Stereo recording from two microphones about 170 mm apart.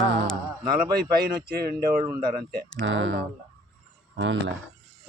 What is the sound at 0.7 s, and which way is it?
Speech, 65° right (ahead or behind).